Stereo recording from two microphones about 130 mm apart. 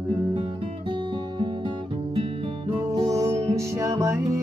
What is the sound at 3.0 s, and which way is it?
Music, 25° right (ahead or behind).